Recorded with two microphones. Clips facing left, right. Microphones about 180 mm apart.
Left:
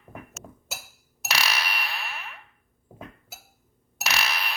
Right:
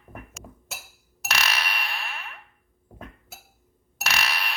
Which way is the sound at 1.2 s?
10° left (ahead or behind).